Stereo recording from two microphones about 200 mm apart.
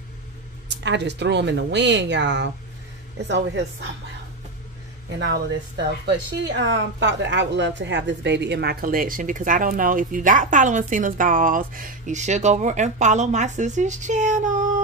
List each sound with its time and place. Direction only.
0.8 s speech: 60° right (ahead or behind)
5.2 s speech: 60° right (ahead or behind); by 14.7 s 40° right (ahead or behind)